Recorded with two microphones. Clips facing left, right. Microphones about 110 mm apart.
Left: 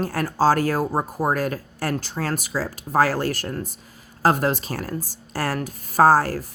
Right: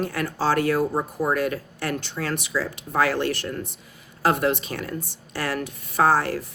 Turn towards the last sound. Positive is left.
turn(degrees=40)  # may be behind; listen again after turning